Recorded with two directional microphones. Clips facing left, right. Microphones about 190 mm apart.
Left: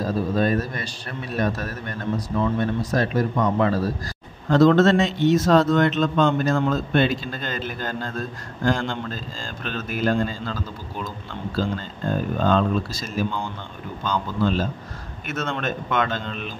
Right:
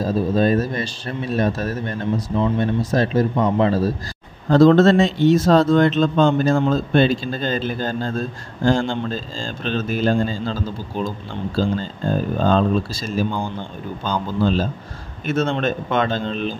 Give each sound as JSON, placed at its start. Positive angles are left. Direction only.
{"t": 0.0, "sound": "a man's voice", "side_deg": -30}